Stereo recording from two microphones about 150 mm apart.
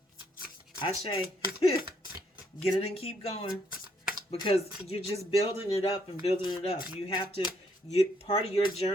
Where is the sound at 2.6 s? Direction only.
40° left (ahead or behind).